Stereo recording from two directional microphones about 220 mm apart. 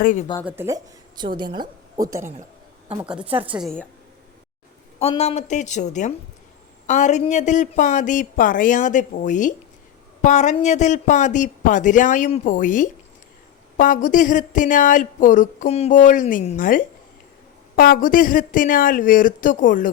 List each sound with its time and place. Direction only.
0.0 s speech: 35° left (ahead or behind)
0.4 s a woman's voice: 10° right (ahead or behind)
4.9 s speech: 25° left (ahead or behind)